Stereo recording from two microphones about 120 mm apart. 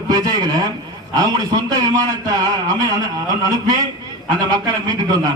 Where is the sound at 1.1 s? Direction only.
35° right (ahead or behind).